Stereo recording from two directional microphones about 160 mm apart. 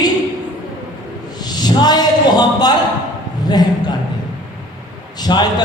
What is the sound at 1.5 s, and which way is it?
A man's voice, 25° left (ahead or behind).